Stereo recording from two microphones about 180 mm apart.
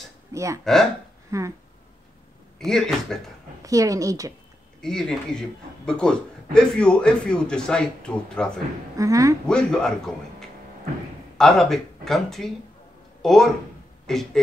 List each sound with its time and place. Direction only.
0.3 s speech: 15° right (ahead or behind)
2.6 s a man's voice: centre (ahead or behind)
3.6 s a woman's voice: 20° right (ahead or behind)
4.8 s a man's voice: 5° left (ahead or behind)
8.9 s a woman's voice: 20° right (ahead or behind)
9.5 s a man's voice: 5° left (ahead or behind)